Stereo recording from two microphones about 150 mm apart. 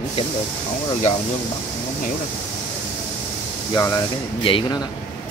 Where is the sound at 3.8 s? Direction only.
25° left (ahead or behind).